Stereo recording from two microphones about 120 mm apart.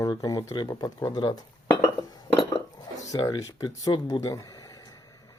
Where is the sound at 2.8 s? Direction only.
30° left (ahead or behind).